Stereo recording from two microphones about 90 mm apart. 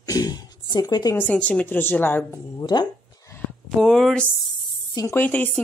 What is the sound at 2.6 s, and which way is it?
Speech, 50° left (ahead or behind).